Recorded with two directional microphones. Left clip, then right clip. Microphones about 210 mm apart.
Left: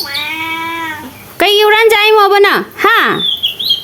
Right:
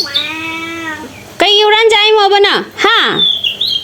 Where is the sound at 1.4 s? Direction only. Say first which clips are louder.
Even; 15° left (ahead or behind).